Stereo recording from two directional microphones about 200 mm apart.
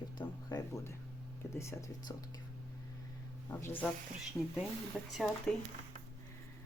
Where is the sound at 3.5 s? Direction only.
10° left (ahead or behind).